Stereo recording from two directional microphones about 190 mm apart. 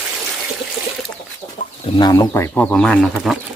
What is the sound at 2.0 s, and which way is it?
Speech, 20° left (ahead or behind).